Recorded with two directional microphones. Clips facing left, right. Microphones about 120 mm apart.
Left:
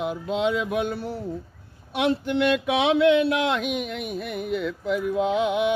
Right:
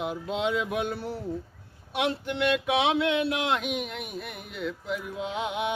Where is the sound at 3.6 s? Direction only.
60° left (ahead or behind).